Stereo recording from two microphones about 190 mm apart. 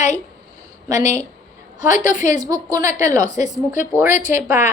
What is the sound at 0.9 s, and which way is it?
Speech, 20° right (ahead or behind).